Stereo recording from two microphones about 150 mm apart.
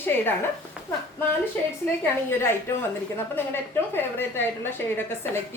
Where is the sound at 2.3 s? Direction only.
15° left (ahead or behind).